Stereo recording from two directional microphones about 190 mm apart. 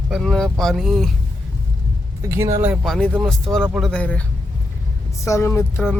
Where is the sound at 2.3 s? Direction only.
15° right (ahead or behind).